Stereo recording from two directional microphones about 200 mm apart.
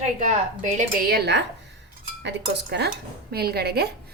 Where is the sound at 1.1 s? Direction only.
55° right (ahead or behind).